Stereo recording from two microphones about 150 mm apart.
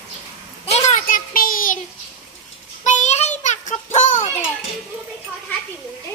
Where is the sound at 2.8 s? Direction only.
50° left (ahead or behind).